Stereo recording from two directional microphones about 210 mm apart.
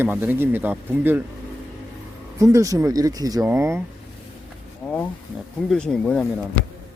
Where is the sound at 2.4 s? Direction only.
15° right (ahead or behind).